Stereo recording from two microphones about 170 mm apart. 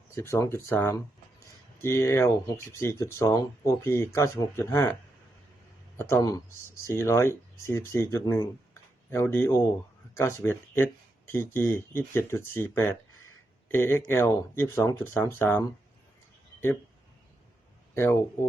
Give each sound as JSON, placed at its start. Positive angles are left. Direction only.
{"t": 0.1, "sound": "speech", "side_deg": 15}
{"t": 6.0, "sound": "speech", "side_deg": 15}
{"t": 17.9, "sound": "speech", "side_deg": 15}